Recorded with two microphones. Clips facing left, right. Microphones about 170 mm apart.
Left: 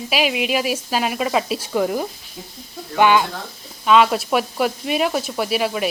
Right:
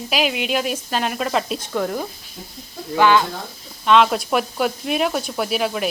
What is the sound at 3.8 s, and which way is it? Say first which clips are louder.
Speech: even; 5° left (ahead or behind).